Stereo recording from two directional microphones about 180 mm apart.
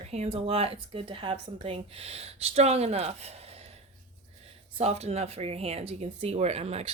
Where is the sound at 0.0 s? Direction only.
35° right (ahead or behind).